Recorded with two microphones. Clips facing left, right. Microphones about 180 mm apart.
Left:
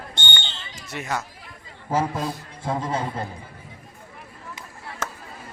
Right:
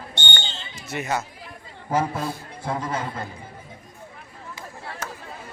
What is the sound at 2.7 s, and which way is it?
Speech, 25° left (ahead or behind).